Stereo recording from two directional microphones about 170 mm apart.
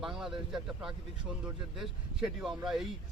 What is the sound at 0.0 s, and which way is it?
Speech, 5° right (ahead or behind).